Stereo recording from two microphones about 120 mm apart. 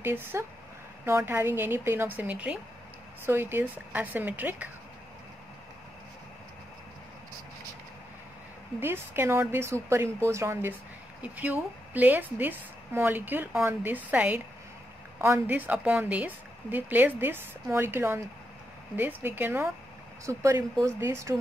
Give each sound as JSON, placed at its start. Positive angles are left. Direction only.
{"t": 0.0, "sound": "a woman's voice", "side_deg": -20}
{"t": 8.7, "sound": "a woman's voice", "side_deg": -20}